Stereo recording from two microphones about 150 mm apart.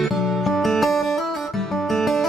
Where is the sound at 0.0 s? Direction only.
Centre (ahead or behind).